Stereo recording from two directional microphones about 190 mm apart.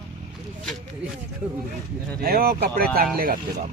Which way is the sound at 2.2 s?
50° right (ahead or behind).